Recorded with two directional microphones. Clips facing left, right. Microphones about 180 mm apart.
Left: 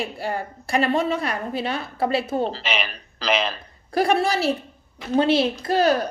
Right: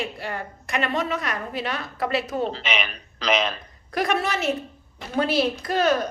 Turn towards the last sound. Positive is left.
turn(degrees=35)  # may be behind; listen again after turning